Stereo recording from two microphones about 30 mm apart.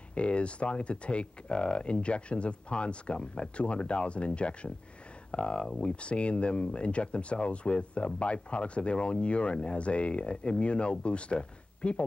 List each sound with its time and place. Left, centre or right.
0.1 s speech: left